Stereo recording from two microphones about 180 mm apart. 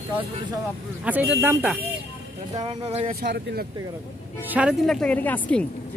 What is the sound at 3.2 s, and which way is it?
Speech, 70° right (ahead or behind).